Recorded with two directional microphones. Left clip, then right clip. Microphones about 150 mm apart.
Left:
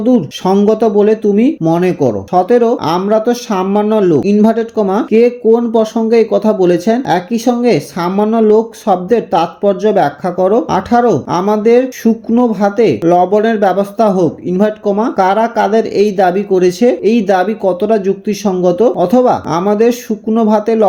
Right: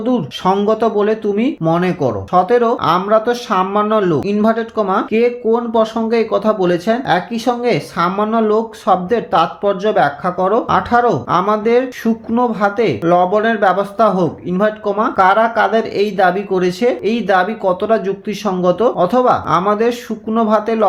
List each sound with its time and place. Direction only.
0.0 s speech: 40° left (ahead or behind)